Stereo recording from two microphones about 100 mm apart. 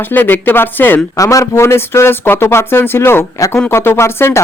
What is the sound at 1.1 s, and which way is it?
A woman's voice, 35° left (ahead or behind).